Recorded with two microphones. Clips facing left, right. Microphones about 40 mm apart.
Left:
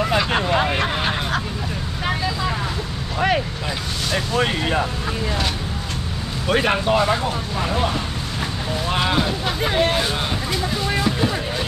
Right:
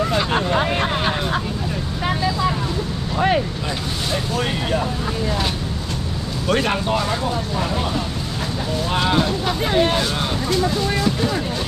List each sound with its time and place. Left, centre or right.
4.1 s vehicle: centre
6.4 s speech: centre
8.9 s speech: centre
11.1 s music: centre